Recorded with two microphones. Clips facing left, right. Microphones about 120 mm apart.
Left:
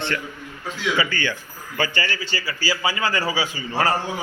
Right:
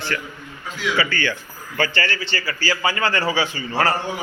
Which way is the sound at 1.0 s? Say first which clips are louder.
Right 1 dB; 15° left (ahead or behind).